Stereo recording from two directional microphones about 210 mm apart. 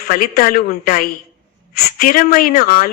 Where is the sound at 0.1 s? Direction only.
45° left (ahead or behind).